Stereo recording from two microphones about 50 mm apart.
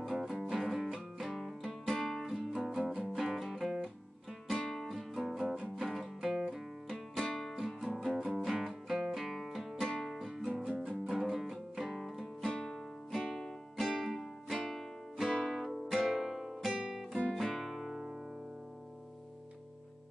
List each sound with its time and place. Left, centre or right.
0.0 s music: centre
5.1 s music: centre
9.3 s music: centre
10.1 s music: centre
15.2 s music: centre
15.5 s music: centre